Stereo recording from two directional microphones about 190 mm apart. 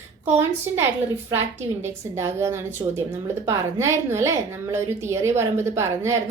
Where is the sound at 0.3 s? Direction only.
15° right (ahead or behind).